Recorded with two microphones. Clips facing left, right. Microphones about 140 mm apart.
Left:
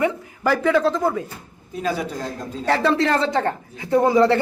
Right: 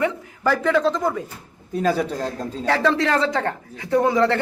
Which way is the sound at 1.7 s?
40° right (ahead or behind).